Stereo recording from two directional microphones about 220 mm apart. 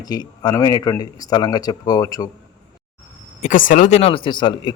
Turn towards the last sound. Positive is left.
turn(degrees=20)  # may be behind; listen again after turning